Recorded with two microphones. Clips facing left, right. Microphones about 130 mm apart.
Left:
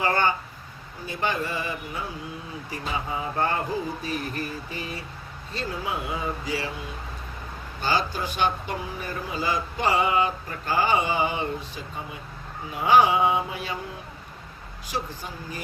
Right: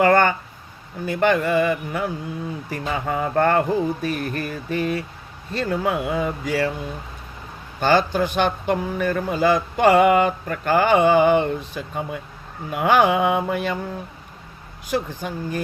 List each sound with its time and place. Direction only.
0.0 s a sound: 60° right (ahead or behind)
1.0 s speech: 60° right (ahead or behind)
7.8 s speech: 60° right (ahead or behind)
14.8 s speech: 55° right (ahead or behind)